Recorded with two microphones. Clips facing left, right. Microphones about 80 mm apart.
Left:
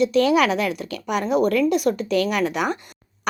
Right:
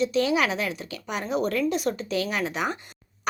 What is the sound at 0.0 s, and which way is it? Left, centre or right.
A woman's voice, left.